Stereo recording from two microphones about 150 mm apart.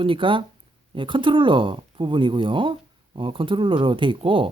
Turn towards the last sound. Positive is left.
turn(degrees=-35)  # may be behind; listen again after turning